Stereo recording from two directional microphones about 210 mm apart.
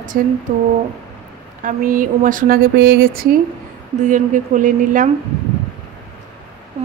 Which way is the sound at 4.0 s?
35° right (ahead or behind).